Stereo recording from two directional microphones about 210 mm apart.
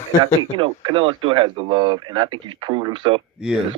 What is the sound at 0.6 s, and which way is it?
Speech, 25° right (ahead or behind).